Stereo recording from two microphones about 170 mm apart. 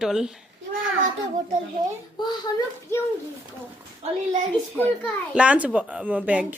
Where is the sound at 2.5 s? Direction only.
25° left (ahead or behind).